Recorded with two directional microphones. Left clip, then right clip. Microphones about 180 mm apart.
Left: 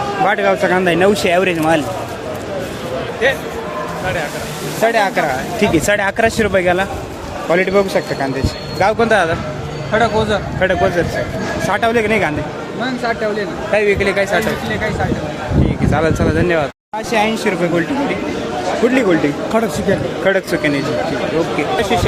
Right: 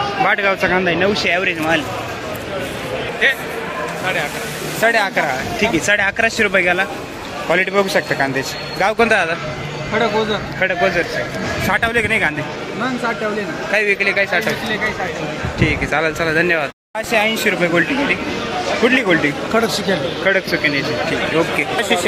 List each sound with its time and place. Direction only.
0.3 s a man's voice: 5° left (ahead or behind)
0.8 s speech: 25° left (ahead or behind)
3.2 s speech: 35° left (ahead or behind)
4.8 s a man's voice: 5° left (ahead or behind)
5.5 s speech: 25° left (ahead or behind)
7.5 s a man's voice: 5° left (ahead or behind)
11.7 s speech: 5° left (ahead or behind)
13.7 s a man's voice: 5° left (ahead or behind)
15.9 s a man's voice: 10° left (ahead or behind)
18.9 s speech: 5° left (ahead or behind)
19.5 s speech: 60° left (ahead or behind)
19.9 s speech: 20° left (ahead or behind)
21.8 s speech: centre (ahead or behind)